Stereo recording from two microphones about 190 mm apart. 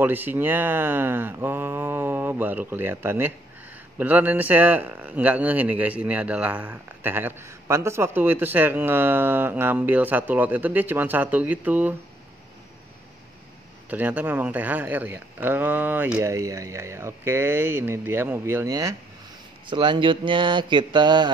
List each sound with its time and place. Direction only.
0.0 s speech: 10° right (ahead or behind)
13.8 s speech: 10° right (ahead or behind); by 21.3 s 25° right (ahead or behind)